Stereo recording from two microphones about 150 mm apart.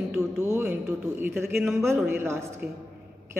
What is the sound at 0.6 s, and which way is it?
Speech, 10° right (ahead or behind).